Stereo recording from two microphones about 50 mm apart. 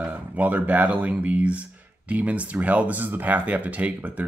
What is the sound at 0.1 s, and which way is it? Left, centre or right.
Speech, right.